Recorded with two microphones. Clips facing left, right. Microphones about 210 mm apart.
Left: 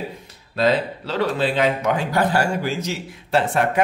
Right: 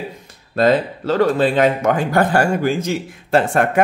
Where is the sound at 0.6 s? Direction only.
50° right (ahead or behind).